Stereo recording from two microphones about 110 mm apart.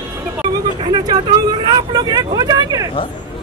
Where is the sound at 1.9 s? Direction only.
35° right (ahead or behind).